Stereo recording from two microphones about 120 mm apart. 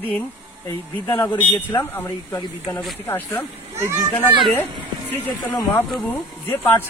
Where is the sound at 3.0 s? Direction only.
15° left (ahead or behind).